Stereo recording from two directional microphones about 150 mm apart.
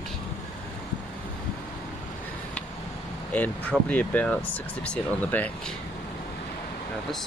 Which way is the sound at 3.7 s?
10° left (ahead or behind).